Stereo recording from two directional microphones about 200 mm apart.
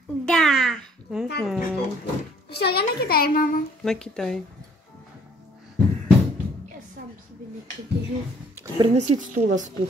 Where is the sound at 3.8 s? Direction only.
5° left (ahead or behind).